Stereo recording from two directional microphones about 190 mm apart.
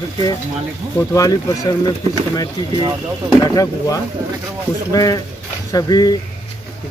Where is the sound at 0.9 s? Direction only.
15° left (ahead or behind).